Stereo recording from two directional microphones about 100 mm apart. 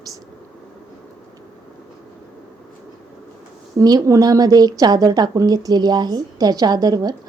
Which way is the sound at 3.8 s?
40° right (ahead or behind).